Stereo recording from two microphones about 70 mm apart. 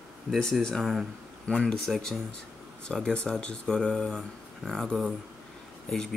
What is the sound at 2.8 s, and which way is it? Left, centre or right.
Speech, centre.